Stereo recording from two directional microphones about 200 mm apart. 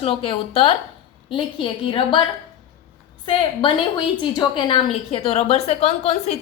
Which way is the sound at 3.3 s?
25° left (ahead or behind).